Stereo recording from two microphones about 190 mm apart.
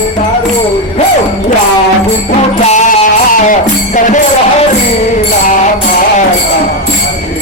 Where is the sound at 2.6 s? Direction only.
40° left (ahead or behind).